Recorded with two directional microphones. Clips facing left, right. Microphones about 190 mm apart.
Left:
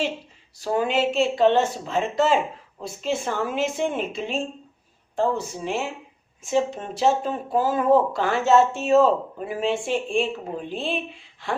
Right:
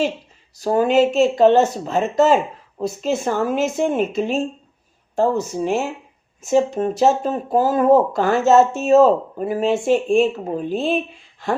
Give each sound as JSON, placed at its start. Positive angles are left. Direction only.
{"t": 0.5, "sound": "speech", "side_deg": -40}